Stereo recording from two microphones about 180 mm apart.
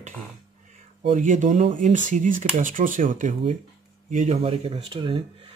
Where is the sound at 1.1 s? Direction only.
45° right (ahead or behind); by 5.2 s 30° right (ahead or behind).